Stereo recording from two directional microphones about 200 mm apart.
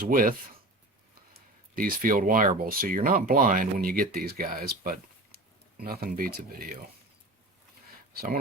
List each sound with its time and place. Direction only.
0.1 s speech: 45° right (ahead or behind)
1.7 s speech: 45° right (ahead or behind)